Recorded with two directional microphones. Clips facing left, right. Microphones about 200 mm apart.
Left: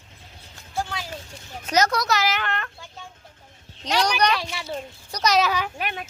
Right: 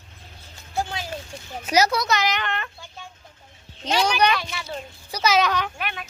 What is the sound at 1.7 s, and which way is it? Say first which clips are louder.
A woman's voice: right 1 dB; 10° right (ahead or behind).